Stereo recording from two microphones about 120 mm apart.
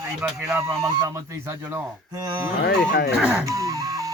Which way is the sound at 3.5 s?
25° right (ahead or behind).